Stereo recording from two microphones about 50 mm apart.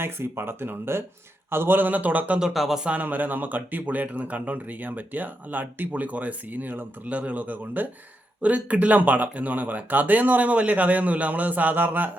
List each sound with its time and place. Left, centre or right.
0.0 s speech: right
2.5 s speech: centre
2.8 s speech: right